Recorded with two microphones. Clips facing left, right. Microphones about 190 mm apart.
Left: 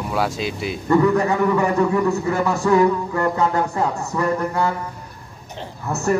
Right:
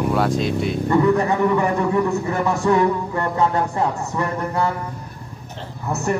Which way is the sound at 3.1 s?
25° right (ahead or behind).